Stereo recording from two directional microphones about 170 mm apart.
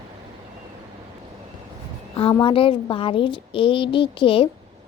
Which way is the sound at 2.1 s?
30° left (ahead or behind).